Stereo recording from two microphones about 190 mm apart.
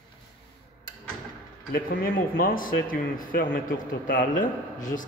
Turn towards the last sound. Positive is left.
turn(degrees=45)  # may be behind; listen again after turning